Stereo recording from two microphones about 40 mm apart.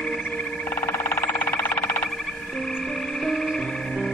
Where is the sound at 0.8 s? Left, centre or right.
Left.